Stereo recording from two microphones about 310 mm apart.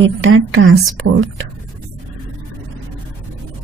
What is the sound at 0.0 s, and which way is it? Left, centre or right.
Speech, right.